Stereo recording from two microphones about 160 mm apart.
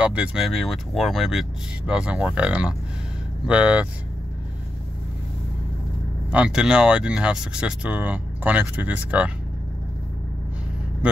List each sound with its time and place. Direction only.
0.0 s speech: 10° right (ahead or behind)
6.3 s speech: 5° right (ahead or behind)